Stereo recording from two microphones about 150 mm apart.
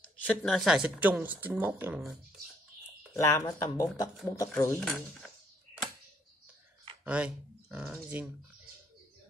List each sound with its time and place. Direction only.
0.2 s speech: 5° left (ahead or behind); by 2.0 s 15° right (ahead or behind)
3.2 s speech: 20° left (ahead or behind)
7.1 s speech: 10° right (ahead or behind)